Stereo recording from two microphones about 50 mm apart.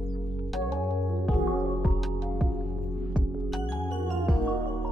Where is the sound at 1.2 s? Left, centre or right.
Centre.